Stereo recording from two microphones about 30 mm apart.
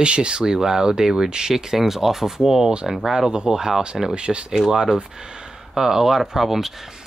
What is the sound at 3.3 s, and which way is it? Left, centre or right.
Speech, right.